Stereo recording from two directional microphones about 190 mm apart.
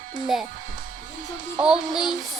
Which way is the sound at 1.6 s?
5° right (ahead or behind).